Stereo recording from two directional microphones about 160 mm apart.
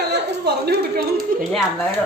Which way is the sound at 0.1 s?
85° right.